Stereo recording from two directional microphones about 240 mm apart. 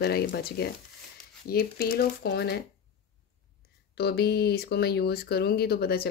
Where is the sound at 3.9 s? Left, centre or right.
Left.